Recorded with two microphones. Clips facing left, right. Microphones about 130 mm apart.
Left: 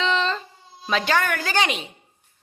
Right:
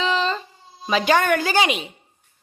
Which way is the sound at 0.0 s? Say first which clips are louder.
Right 1 dB; 5° right (ahead or behind).